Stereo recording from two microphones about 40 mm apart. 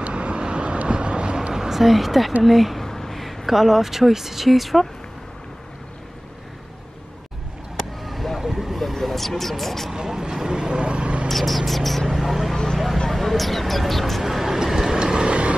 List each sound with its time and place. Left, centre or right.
0.0 s vehicle: right
1.5 s speech: centre
2.8 s a sound: centre
3.2 s speech: centre
8.0 s vehicle: centre
9.9 s vehicle: centre
11.2 s a sound: centre
12.1 s vehicle: centre
12.7 s a sound: centre
14.2 s vehicle: centre; by 15.5 s right